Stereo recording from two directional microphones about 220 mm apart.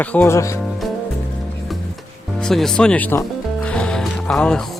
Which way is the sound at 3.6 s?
5° left (ahead or behind).